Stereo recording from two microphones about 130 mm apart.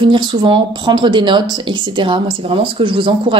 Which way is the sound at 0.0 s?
35° right (ahead or behind).